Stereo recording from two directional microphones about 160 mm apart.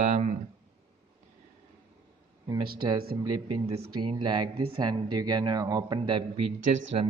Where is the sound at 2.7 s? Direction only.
25° right (ahead or behind).